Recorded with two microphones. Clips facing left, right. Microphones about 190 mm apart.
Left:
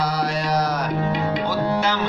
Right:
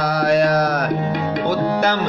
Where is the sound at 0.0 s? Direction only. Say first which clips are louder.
Right 7 dB; 55° right (ahead or behind).